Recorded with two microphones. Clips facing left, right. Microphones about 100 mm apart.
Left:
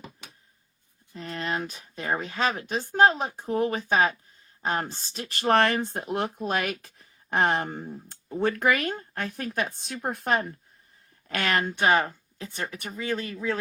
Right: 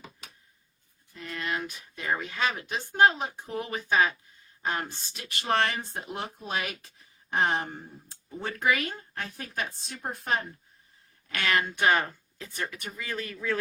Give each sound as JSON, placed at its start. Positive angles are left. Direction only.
{"t": 1.1, "sound": "speech", "side_deg": 30}
{"t": 11.3, "sound": "speech", "side_deg": 40}
{"t": 11.8, "sound": "speech", "side_deg": 25}